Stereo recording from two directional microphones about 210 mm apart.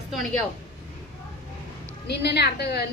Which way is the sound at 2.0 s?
50° left (ahead or behind).